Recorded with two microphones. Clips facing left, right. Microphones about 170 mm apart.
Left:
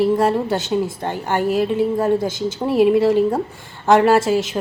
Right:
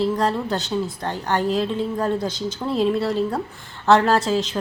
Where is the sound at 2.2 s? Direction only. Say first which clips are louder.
Left 3 dB; 50° left (ahead or behind).